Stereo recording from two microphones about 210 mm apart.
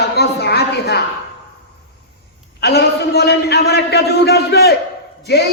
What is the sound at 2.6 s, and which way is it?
A man's voice, 50° left (ahead or behind).